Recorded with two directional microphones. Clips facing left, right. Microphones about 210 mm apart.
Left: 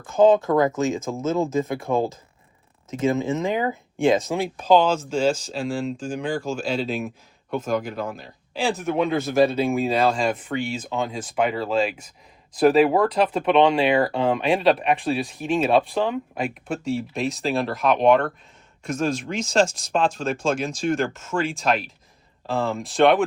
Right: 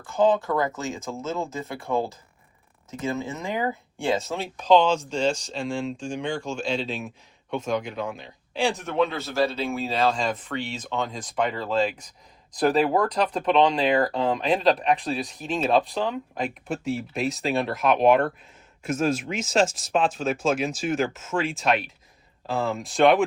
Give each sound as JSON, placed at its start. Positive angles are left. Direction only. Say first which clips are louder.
{"t": 0.0, "sound": "speech", "louder": "left 5 dB", "side_deg": 20}